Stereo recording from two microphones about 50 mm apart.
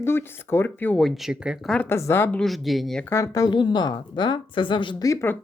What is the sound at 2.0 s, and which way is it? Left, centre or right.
Speech, left.